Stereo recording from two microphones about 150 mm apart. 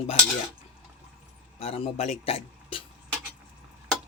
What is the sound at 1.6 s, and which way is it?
A man's voice, 45° left (ahead or behind).